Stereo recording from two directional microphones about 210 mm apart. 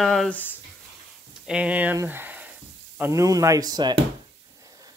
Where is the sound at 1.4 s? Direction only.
5° right (ahead or behind).